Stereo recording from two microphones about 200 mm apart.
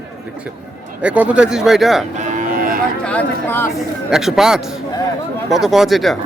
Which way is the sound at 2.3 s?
40° right (ahead or behind).